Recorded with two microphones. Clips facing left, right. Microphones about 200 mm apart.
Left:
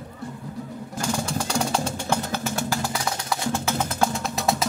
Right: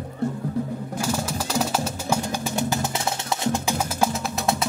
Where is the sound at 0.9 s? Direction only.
5° right (ahead or behind).